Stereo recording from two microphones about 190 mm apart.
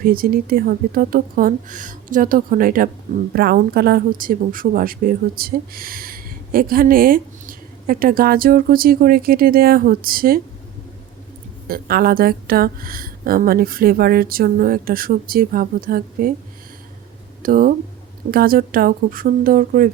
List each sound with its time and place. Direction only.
0.0 s speech: 50° right (ahead or behind)
11.7 s speech: 50° right (ahead or behind)
17.4 s speech: 50° right (ahead or behind)